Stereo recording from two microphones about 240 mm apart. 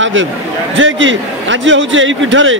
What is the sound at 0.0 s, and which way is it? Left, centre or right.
A man's voice, right.